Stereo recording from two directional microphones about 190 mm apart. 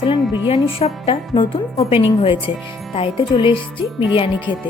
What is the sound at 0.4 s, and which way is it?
A woman's voice, 30° left (ahead or behind).